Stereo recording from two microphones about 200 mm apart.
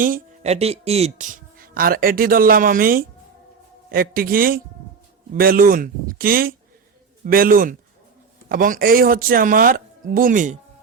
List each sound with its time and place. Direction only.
0.0 s speech: 40° right (ahead or behind)